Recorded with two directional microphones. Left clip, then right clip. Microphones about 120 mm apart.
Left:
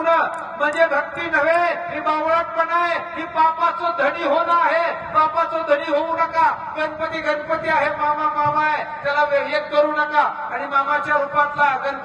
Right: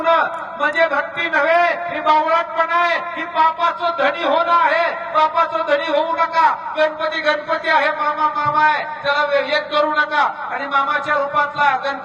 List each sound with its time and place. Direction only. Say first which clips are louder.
0.0 s a man's voice: right 2 dB; 30° right (ahead or behind)